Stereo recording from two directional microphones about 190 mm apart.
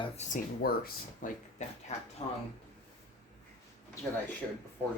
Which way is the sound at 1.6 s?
35° left (ahead or behind).